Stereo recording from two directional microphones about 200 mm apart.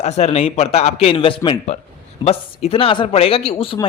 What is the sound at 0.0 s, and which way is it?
A man's voice, 35° left (ahead or behind).